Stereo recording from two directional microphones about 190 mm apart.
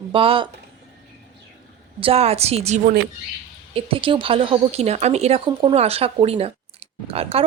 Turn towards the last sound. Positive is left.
turn(degrees=-30)  # may be behind; listen again after turning